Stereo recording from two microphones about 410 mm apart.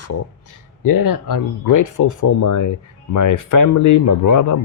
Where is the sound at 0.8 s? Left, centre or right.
Left.